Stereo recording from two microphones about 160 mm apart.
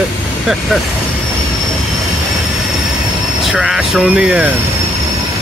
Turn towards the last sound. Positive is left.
turn(degrees=-5)  # may be behind; listen again after turning